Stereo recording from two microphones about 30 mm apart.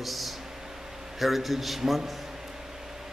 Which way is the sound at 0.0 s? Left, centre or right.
Centre.